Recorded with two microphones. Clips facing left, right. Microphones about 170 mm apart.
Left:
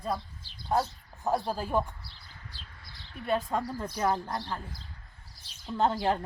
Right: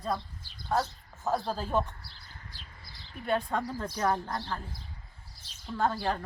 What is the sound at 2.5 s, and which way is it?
Bird, 15° right (ahead or behind).